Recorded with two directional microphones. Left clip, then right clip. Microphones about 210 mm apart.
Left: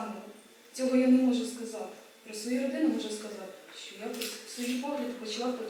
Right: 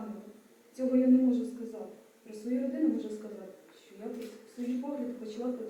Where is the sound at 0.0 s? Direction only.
15° right (ahead or behind).